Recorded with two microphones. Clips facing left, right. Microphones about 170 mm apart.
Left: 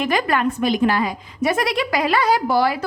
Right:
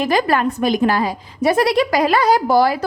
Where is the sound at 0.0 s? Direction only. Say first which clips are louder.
Right 3 dB; 35° right (ahead or behind).